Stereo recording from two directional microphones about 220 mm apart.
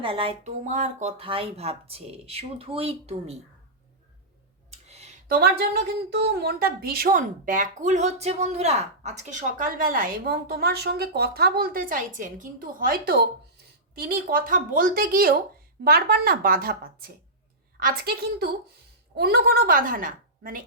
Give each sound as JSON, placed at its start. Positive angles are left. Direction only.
{"t": 0.0, "sound": "speech", "side_deg": -25}
{"t": 4.7, "sound": "a sound", "side_deg": -30}
{"t": 5.4, "sound": "a woman's voice", "side_deg": -45}